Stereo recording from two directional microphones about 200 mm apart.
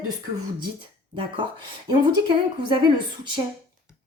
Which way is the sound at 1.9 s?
25° right (ahead or behind).